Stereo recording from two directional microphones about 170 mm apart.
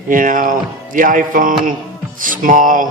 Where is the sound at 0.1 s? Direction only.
50° right (ahead or behind).